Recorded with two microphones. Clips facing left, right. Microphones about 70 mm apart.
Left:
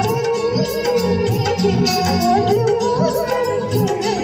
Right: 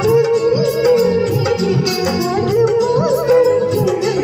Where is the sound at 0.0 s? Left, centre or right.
Right.